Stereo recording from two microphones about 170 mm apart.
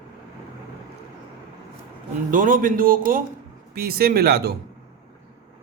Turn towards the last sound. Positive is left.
turn(degrees=-70)  # may be behind; listen again after turning